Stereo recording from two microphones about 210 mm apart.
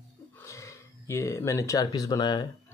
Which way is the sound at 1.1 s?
15° left (ahead or behind).